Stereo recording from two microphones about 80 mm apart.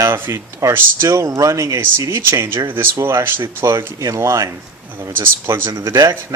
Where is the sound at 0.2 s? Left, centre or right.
Right.